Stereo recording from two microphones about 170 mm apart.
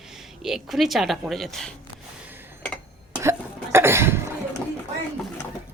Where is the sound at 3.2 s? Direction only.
15° right (ahead or behind).